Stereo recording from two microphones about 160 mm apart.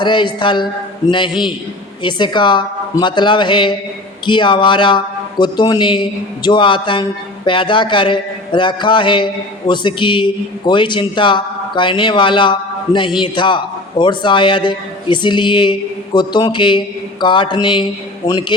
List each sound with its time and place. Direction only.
0.0 s a man's voice: 30° left (ahead or behind)